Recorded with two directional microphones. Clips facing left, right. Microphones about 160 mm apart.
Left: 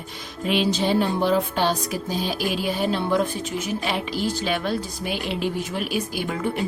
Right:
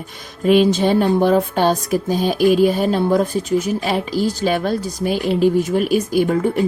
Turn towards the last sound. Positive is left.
turn(degrees=-45)  # may be behind; listen again after turning